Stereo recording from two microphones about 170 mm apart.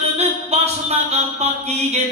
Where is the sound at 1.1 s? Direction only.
40° right (ahead or behind).